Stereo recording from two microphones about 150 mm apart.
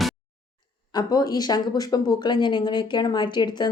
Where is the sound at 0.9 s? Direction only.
25° left (ahead or behind).